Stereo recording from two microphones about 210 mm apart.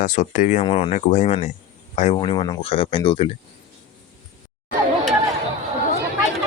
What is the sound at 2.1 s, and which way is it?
Speech, 20° left (ahead or behind).